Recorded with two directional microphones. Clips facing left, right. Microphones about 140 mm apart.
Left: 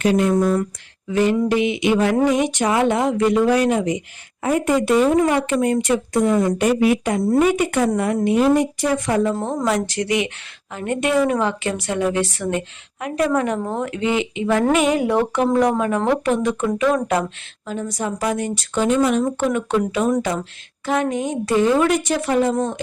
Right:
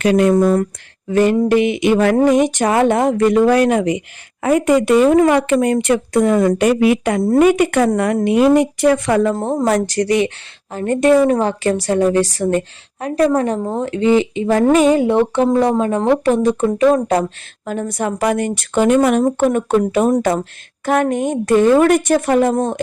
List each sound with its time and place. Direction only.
0.0 s speech: 75° right (ahead or behind)
0.5 s a woman's voice: 50° right (ahead or behind)
4.4 s speech: 85° right; by 9.3 s 70° right (ahead or behind)
9.3 s a woman's voice: 35° right (ahead or behind)
9.6 s a woman's voice: 45° right (ahead or behind)
17.7 s a woman's voice: 55° right (ahead or behind)